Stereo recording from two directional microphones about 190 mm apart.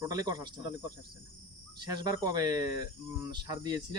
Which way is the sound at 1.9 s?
20° right (ahead or behind).